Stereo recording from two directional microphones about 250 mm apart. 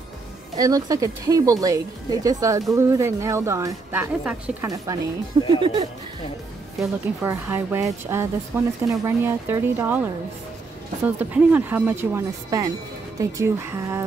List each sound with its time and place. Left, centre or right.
0.6 s speech: centre
6.8 s speech: centre
11.1 s speech: centre